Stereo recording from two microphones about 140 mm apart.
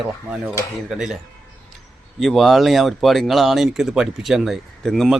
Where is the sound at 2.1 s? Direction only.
Centre (ahead or behind).